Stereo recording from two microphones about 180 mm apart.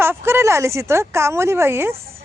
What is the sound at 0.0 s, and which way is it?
Speech, 15° right (ahead or behind).